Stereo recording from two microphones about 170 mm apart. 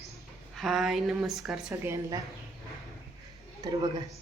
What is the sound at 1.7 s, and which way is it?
Speech, 20° right (ahead or behind).